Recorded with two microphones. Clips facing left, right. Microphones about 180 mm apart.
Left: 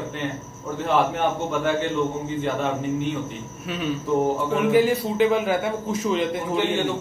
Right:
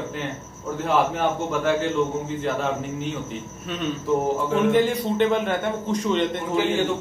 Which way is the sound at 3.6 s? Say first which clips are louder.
Even; 5° left (ahead or behind).